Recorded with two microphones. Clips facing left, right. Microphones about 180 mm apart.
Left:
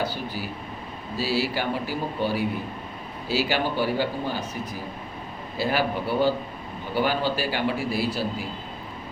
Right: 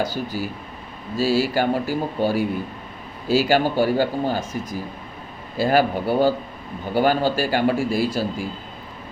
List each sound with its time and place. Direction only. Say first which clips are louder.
0.1 s a man's voice: right 5 dB; 45° right (ahead or behind)
5.5 s a man's voice: right 6 dB; 45° right (ahead or behind)